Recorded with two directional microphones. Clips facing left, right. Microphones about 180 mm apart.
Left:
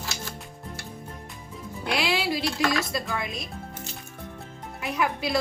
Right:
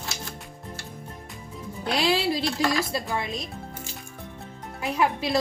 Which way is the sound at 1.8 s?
35° right (ahead or behind).